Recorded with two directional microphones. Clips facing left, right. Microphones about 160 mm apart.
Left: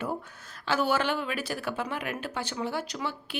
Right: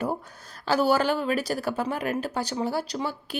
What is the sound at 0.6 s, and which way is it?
Speech, 40° right (ahead or behind).